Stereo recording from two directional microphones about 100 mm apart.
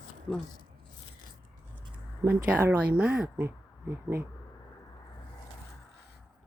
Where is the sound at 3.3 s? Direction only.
25° right (ahead or behind).